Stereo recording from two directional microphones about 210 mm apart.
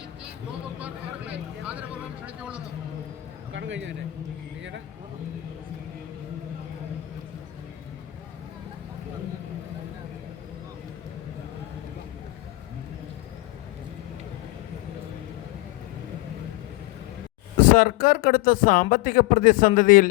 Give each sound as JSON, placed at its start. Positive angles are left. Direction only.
{"t": 0.8, "sound": "speech", "side_deg": -5}
{"t": 3.5, "sound": "a man's voice", "side_deg": -60}
{"t": 17.6, "sound": "speech", "side_deg": 40}